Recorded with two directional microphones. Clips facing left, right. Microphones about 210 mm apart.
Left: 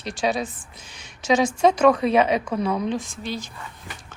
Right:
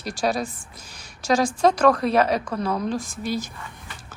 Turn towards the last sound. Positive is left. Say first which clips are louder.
# right 1 dB
turn(degrees=0)  # may be behind; listen again after turning